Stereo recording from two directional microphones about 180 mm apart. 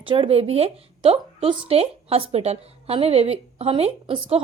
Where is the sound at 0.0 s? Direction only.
30° right (ahead or behind).